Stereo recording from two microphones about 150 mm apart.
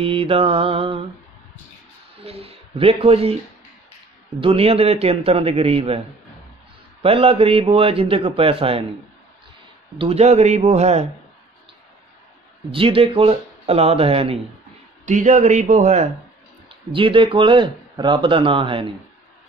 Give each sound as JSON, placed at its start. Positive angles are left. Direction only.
{"t": 0.0, "sound": "speech", "side_deg": -40}
{"t": 2.2, "sound": "speech", "side_deg": -40}
{"t": 4.4, "sound": "speech", "side_deg": -40}
{"t": 7.0, "sound": "speech", "side_deg": -40}
{"t": 9.9, "sound": "a man's voice", "side_deg": -45}
{"t": 12.7, "sound": "speech", "side_deg": -40}
{"t": 15.0, "sound": "a man's voice", "side_deg": -55}
{"t": 16.9, "sound": "speech", "side_deg": -35}